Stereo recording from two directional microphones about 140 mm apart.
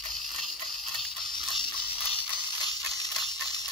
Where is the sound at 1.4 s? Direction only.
35° left (ahead or behind).